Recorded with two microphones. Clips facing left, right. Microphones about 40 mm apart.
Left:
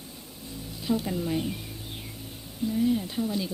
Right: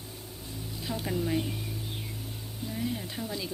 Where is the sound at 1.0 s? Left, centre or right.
Centre.